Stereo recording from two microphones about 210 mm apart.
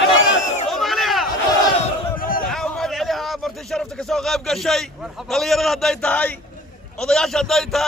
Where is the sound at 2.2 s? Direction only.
40° left (ahead or behind).